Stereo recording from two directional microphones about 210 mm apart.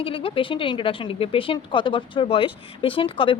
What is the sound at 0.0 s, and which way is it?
A woman's voice, 25° left (ahead or behind).